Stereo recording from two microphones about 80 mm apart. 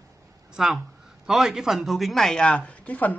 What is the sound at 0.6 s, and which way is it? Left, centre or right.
Speech, centre.